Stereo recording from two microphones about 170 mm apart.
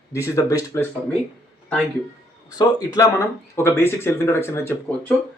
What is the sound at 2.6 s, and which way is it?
Speech, 20° left (ahead or behind).